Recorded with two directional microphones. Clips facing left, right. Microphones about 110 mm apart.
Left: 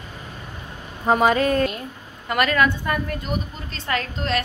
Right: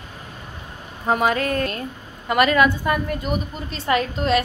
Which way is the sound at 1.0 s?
Centre (ahead or behind).